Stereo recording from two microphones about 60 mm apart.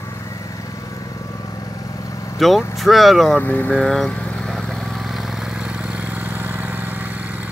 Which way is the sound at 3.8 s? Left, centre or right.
Centre.